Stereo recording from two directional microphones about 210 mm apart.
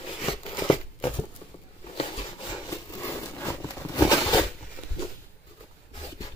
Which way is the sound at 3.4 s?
10° left (ahead or behind).